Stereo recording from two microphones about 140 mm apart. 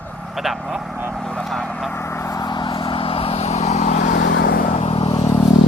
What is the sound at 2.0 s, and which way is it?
Vehicle, 15° left (ahead or behind).